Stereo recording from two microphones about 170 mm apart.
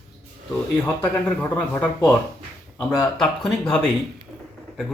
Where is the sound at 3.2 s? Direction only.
Centre (ahead or behind).